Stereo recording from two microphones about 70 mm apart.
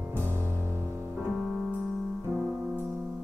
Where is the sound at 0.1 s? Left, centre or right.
Right.